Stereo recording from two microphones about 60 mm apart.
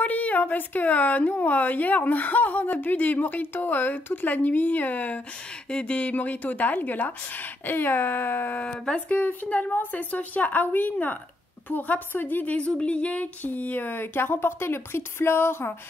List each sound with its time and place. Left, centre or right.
0.0 s speech: left
8.5 s speech: centre; by 15.7 s left